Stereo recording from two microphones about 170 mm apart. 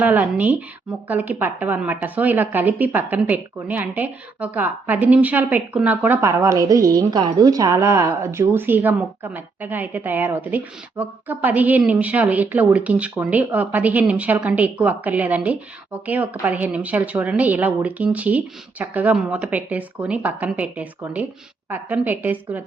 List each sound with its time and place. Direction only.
0.0 s a woman's voice: 10° right (ahead or behind)